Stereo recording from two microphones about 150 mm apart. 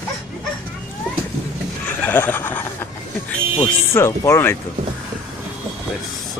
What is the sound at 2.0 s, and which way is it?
Neigh, 10° left (ahead or behind).